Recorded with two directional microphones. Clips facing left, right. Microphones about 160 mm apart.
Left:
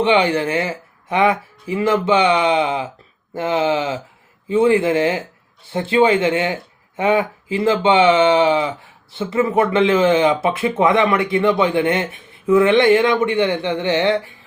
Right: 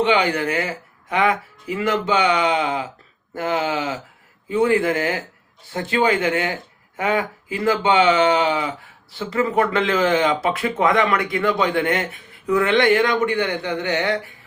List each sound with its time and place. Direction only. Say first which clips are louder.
0.0 s speech: left 3 dB; 25° left (ahead or behind)